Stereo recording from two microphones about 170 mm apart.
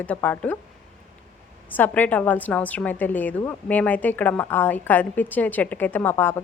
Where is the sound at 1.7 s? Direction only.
10° left (ahead or behind).